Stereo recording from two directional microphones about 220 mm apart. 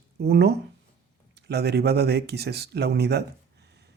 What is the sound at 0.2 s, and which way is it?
Speech, 45° right (ahead or behind).